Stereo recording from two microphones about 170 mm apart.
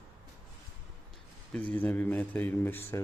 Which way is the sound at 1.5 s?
10° left (ahead or behind).